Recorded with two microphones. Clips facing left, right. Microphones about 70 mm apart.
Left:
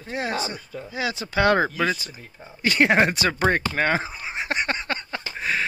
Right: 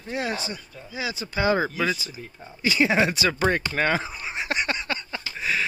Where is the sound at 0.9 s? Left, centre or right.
Left.